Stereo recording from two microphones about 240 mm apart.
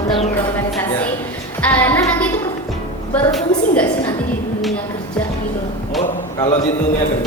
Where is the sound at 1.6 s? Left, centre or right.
Centre.